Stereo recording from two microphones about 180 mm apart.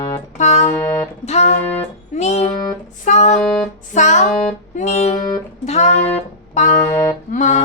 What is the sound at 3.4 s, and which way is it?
Music, centre (ahead or behind).